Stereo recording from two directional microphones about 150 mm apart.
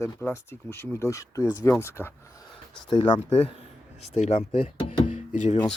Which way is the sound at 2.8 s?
30° left (ahead or behind).